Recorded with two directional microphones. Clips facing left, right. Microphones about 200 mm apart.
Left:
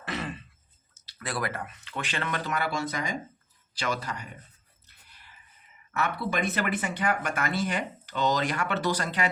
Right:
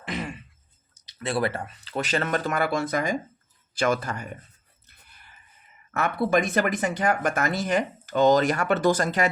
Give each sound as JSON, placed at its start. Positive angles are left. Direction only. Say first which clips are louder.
{"t": 0.0, "sound": "a sound", "louder": "right 2 dB", "side_deg": -15}
{"t": 0.9, "sound": "speech", "louder": "right 7 dB", "side_deg": -20}
{"t": 5.0, "sound": "chicken", "louder": "right 1 dB", "side_deg": -50}
{"t": 5.9, "sound": "speech", "louder": "right 7 dB", "side_deg": -45}